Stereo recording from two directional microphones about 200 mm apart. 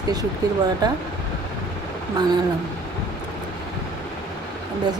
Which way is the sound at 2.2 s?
20° right (ahead or behind).